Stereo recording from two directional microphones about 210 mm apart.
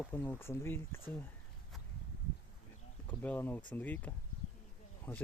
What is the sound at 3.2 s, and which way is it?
Speech, 10° left (ahead or behind).